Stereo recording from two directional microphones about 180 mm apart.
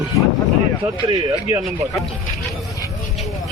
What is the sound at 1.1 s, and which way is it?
Speech, 20° right (ahead or behind).